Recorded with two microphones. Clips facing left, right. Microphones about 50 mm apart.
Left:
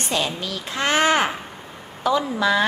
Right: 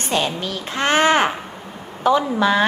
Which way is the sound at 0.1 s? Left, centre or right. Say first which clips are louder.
Right 4 dB; right.